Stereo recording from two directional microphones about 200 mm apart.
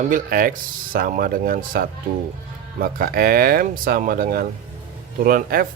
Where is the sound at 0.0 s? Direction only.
45° right (ahead or behind).